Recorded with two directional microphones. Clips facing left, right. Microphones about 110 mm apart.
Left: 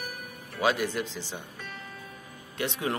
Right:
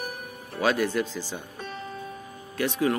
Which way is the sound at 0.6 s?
15° left (ahead or behind).